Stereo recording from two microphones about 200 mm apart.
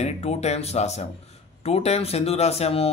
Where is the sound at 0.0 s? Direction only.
35° left (ahead or behind).